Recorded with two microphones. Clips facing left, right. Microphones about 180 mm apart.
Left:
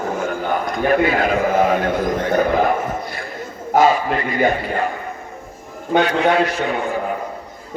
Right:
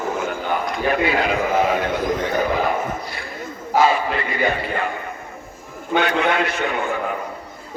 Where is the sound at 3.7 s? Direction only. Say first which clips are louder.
Left 3 dB; 45° left (ahead or behind).